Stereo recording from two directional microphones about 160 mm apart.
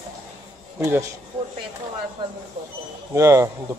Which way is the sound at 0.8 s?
20° right (ahead or behind).